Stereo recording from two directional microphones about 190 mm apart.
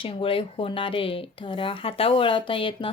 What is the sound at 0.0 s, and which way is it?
Speech, 30° left (ahead or behind).